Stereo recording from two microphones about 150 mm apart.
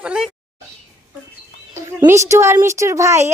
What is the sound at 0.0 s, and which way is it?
Speech, 5° right (ahead or behind).